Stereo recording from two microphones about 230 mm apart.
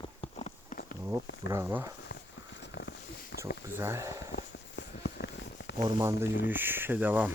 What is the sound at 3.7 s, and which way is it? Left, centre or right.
Speech, centre.